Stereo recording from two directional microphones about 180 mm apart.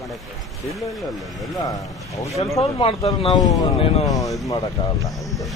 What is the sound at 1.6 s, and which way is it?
Speech, 20° left (ahead or behind).